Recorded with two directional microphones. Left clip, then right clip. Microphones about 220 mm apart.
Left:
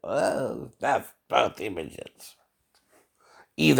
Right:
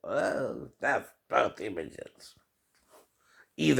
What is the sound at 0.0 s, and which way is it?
Speech, 45° left (ahead or behind).